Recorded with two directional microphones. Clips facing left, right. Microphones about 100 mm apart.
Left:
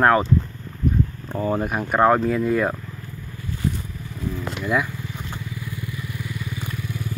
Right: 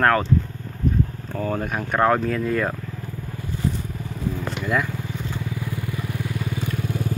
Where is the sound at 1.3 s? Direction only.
10° left (ahead or behind).